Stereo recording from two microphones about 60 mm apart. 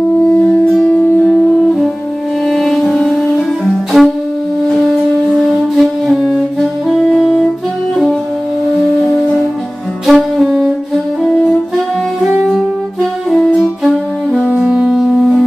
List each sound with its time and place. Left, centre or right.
0.8 s music: centre
2.4 s music: centre
5.5 s music: centre
6.9 s saxophone: centre
10.0 s saxophone: centre
13.6 s saxophone: centre
14.4 s music: centre
14.7 s music: centre